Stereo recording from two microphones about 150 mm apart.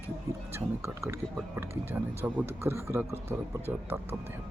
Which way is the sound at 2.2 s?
15° right (ahead or behind).